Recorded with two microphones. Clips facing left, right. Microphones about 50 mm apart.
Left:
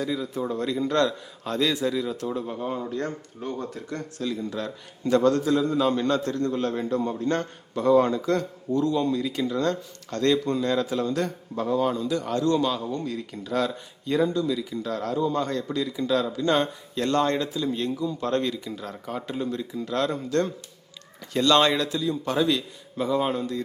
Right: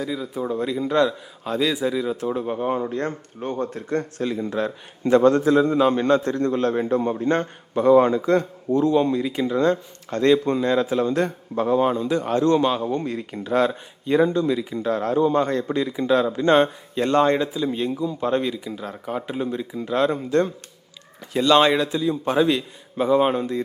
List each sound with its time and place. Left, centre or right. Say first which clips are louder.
0.0 s a man's voice: right 1 dB; centre
2.2 s a man's voice: right 5 dB; right